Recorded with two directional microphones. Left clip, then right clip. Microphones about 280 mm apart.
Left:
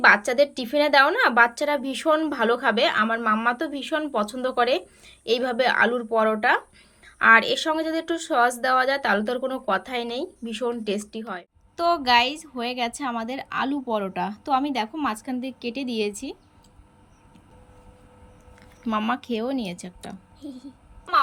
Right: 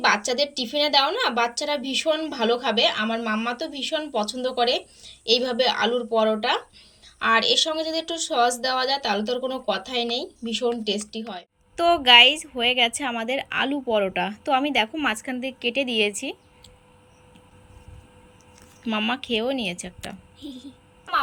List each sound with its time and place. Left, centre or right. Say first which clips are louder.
0.0 s speech: left 4 dB; centre
18.8 s speech: even; centre